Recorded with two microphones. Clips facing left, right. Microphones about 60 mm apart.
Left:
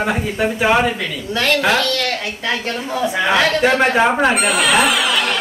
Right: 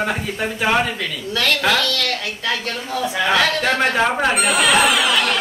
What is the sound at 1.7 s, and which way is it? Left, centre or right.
A man's voice, left.